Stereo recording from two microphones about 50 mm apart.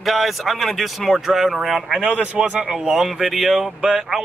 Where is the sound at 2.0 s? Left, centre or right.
Right.